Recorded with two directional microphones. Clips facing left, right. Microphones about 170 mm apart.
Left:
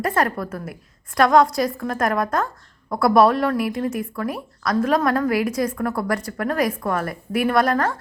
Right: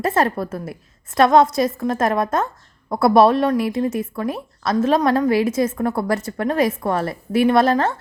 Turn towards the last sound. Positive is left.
turn(degrees=-25)  # may be behind; listen again after turning